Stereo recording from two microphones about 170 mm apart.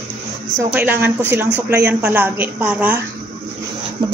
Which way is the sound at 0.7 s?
10° right (ahead or behind).